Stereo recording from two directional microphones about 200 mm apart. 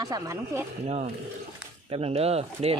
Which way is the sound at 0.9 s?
35° right (ahead or behind).